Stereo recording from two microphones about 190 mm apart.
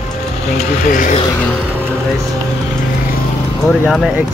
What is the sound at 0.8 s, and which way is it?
Speech, 45° left (ahead or behind).